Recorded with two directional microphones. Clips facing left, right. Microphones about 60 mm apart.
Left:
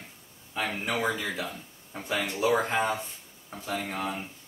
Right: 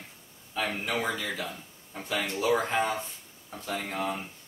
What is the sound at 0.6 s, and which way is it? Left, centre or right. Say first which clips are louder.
Speech: left 1 dB; centre.